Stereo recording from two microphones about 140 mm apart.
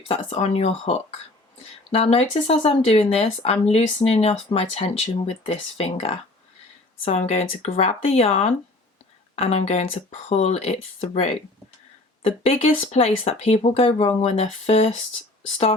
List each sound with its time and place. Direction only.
0.1 s speech: 50° left (ahead or behind)